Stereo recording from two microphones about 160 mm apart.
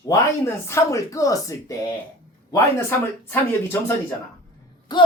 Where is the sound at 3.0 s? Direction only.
15° left (ahead or behind).